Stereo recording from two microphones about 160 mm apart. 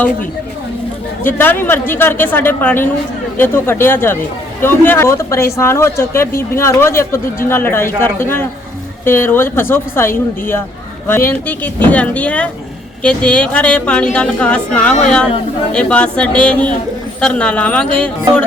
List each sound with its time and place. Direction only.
1.2 s speech: 15° left (ahead or behind)